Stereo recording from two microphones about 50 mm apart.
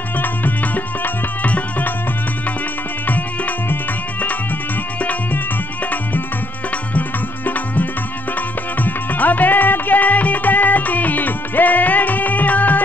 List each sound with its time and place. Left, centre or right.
0.2 s music: left
3.1 s music: left
6.9 s tabla: left
8.8 s music: left